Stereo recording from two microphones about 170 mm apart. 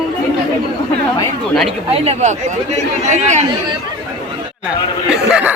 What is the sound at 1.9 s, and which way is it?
A man's voice, 40° right (ahead or behind).